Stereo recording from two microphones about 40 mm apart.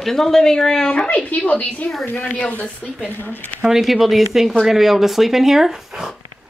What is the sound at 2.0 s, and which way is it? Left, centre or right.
Speech, left.